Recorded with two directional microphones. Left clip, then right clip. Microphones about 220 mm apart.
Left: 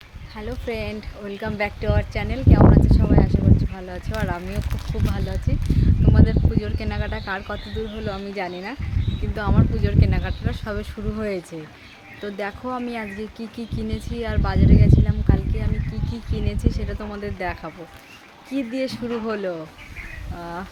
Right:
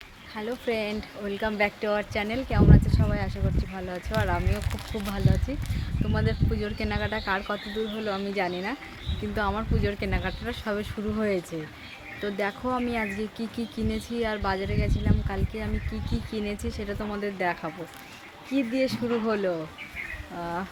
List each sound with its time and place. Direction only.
0.3 s speech: 5° left (ahead or behind)